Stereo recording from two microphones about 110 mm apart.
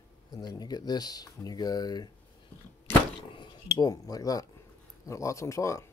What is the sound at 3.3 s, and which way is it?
Speech, 40° left (ahead or behind).